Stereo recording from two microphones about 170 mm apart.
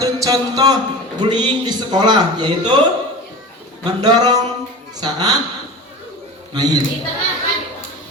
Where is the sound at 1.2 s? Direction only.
25° right (ahead or behind).